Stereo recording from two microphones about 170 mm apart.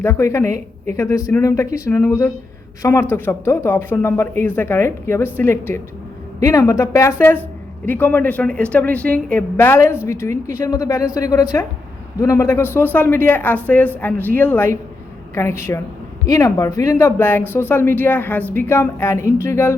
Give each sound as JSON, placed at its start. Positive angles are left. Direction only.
{"t": 0.0, "sound": "speech", "side_deg": 15}